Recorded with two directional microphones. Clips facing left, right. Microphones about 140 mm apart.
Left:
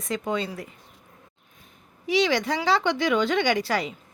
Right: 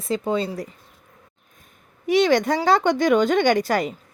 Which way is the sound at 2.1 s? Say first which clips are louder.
Right 5 dB; 50° right (ahead or behind).